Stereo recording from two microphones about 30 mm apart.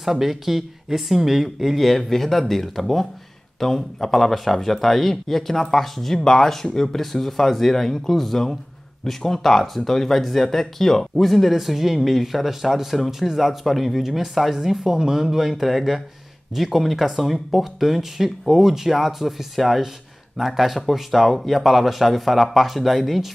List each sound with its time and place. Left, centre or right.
0.0 s speech: centre